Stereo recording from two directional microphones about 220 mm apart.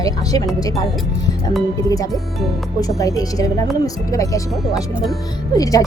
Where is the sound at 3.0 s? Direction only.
15° left (ahead or behind).